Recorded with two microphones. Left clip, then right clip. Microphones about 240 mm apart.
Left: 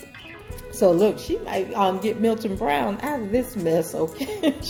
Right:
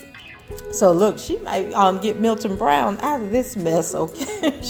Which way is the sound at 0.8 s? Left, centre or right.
Right.